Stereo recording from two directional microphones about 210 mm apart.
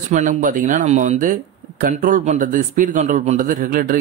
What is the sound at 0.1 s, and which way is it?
Speech, 35° right (ahead or behind).